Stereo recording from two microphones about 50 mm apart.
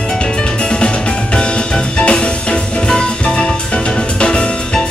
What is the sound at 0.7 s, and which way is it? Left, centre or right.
Music, centre.